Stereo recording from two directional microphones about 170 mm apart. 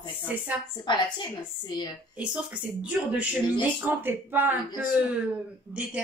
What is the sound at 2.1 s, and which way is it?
A woman's voice, 5° right (ahead or behind).